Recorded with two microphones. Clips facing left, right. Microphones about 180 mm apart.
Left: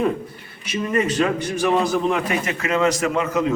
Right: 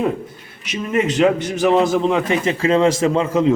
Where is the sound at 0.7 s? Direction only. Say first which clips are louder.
Right 2 dB; 20° right (ahead or behind).